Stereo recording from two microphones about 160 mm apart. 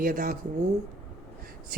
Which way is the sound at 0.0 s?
60° right (ahead or behind).